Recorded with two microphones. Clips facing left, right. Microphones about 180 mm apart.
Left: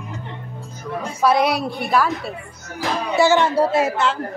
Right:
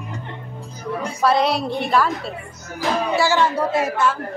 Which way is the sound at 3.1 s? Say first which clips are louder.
Left 6 dB; 20° left (ahead or behind).